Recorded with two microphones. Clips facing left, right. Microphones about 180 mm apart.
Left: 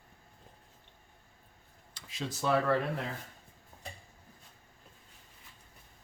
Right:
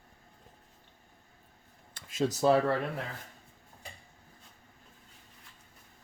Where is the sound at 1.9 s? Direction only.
50° right (ahead or behind).